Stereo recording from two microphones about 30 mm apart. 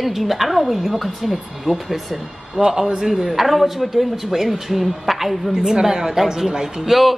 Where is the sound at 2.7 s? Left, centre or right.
Centre.